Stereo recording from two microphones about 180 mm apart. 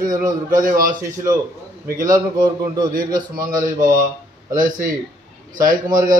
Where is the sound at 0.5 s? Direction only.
50° right (ahead or behind).